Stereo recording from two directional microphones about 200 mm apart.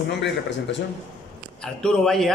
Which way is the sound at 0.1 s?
60° left (ahead or behind).